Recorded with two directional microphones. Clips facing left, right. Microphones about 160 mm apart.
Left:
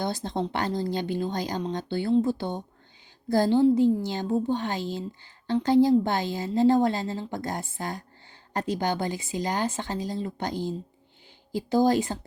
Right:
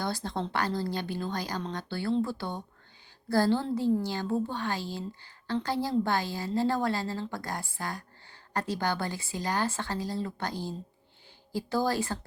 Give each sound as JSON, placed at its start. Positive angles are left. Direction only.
{"t": 0.0, "sound": "a woman's voice", "side_deg": 20}